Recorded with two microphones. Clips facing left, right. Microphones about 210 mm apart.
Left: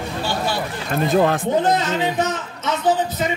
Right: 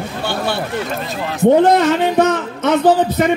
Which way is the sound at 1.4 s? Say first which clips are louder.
Right 8 dB; 60° right (ahead or behind).